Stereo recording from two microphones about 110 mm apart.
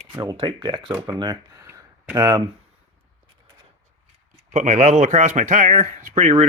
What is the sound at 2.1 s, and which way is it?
Speech, 45° right (ahead or behind).